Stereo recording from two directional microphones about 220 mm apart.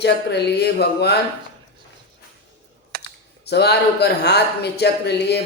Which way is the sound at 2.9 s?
45° right (ahead or behind).